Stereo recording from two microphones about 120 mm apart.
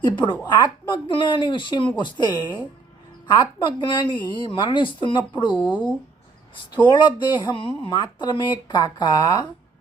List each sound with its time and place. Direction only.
0.0 s speech: 40° left (ahead or behind)
6.9 s speech: 40° left (ahead or behind)
7.9 s speech: 35° left (ahead or behind)